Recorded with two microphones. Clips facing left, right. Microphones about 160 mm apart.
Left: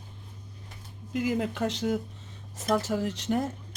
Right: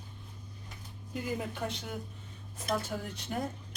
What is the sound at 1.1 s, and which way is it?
Speech, 90° left.